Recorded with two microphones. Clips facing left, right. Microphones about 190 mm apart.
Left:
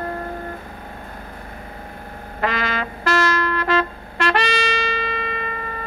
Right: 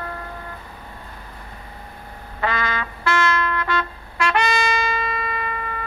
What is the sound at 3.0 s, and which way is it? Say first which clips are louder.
Music: left 2 dB; 40° left (ahead or behind).